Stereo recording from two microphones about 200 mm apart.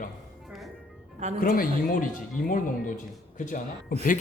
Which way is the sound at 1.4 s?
45° left (ahead or behind).